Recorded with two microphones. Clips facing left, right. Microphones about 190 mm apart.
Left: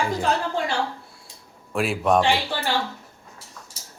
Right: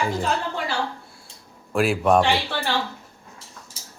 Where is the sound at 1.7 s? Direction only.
Centre (ahead or behind).